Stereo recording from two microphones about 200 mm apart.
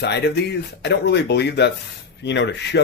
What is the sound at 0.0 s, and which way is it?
Speech, 55° left (ahead or behind).